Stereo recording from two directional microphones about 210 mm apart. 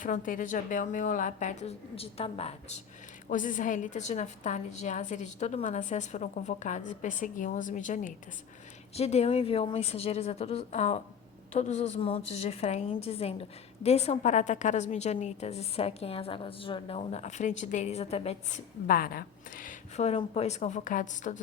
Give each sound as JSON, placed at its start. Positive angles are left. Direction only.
{"t": 0.0, "sound": "a woman's voice", "side_deg": 40}
{"t": 18.9, "sound": "a woman's voice", "side_deg": 45}